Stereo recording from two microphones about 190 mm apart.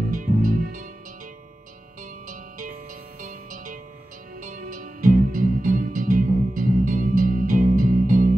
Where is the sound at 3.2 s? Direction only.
45° right (ahead or behind).